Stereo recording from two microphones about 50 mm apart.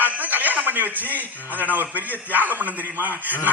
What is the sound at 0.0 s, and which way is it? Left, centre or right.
A man's voice, right.